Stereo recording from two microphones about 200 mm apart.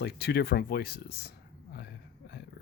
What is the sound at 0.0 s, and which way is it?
Speech, 55° left (ahead or behind).